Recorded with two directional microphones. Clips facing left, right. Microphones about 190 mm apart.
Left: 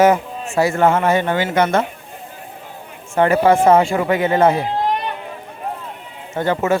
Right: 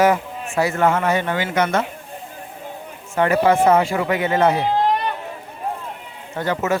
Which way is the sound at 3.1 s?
30° left (ahead or behind).